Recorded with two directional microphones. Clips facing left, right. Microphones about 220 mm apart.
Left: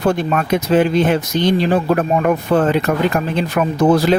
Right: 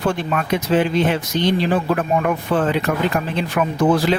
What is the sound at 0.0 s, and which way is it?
Speech, 40° left (ahead or behind).